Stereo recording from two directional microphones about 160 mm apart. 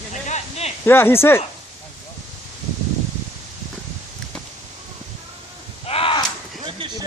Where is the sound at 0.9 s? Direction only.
15° left (ahead or behind).